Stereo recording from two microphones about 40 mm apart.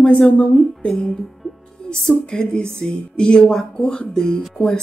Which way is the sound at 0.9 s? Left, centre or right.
Centre.